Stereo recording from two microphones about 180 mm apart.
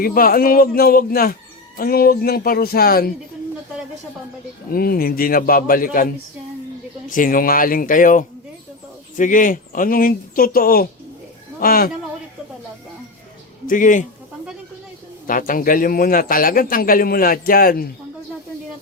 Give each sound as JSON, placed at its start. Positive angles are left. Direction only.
{"t": 0.0, "sound": "speech", "side_deg": 55}
{"t": 4.7, "sound": "speech", "side_deg": 55}
{"t": 7.1, "sound": "speech", "side_deg": 50}
{"t": 13.7, "sound": "speech", "side_deg": 45}
{"t": 15.3, "sound": "speech", "side_deg": 50}